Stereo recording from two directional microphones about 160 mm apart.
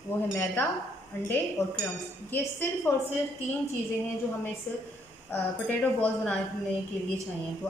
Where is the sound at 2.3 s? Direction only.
15° left (ahead or behind).